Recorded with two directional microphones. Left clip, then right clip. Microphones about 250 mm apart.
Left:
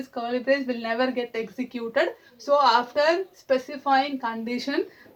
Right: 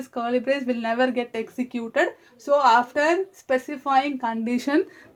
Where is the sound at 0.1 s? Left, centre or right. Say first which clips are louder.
Right 1 dB; right.